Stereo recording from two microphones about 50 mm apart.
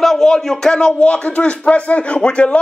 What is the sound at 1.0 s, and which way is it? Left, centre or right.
Speech, left.